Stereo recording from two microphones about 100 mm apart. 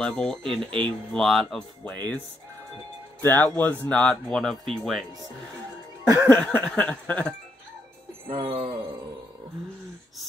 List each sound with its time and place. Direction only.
0.0 s speech: 10° left (ahead or behind)
1.9 s speech: 15° left (ahead or behind)
3.2 s speech: 20° left (ahead or behind); by 5.0 s centre (ahead or behind)
6.2 s speech: 15° left (ahead or behind)
8.3 s music: 65° right (ahead or behind)